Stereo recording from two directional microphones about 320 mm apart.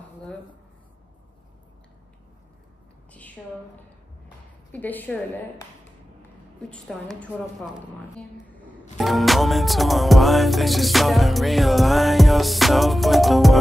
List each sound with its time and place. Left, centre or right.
0.2 s speech: centre
3.1 s a sound: centre
4.7 s music: centre
6.7 s music: centre